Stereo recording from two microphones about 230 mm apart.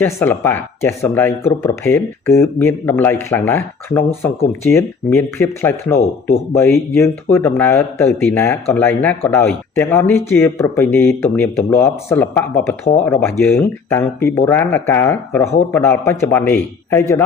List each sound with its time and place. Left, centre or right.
0.0 s speech: centre